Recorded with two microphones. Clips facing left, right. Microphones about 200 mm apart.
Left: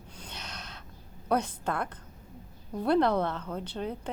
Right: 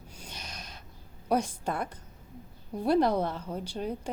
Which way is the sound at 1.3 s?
10° right (ahead or behind).